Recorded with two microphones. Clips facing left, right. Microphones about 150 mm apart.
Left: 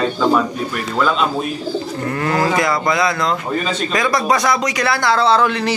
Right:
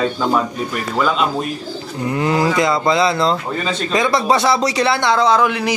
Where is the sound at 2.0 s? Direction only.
15° right (ahead or behind).